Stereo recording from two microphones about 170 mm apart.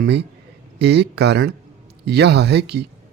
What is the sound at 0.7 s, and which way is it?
Speech, 80° right.